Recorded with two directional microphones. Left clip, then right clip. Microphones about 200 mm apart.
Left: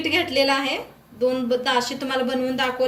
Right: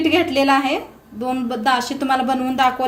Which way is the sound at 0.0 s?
45° right (ahead or behind).